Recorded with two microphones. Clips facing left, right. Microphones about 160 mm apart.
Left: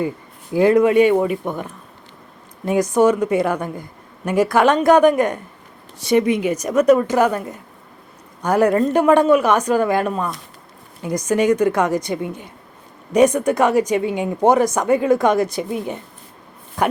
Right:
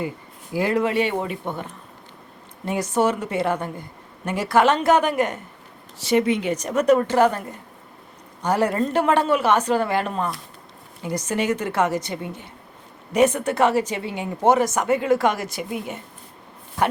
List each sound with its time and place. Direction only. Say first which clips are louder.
0.5 s a woman's voice: left 8 dB; 20° left (ahead or behind)
2.6 s a woman's voice: left 6 dB; 15° left (ahead or behind)